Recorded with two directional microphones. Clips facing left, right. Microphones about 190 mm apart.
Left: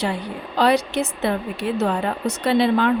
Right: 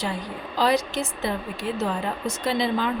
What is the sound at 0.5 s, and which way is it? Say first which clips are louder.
Speech: left 4 dB; 65° left (ahead or behind).